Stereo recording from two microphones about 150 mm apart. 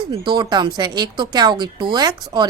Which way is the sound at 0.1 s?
30° right (ahead or behind).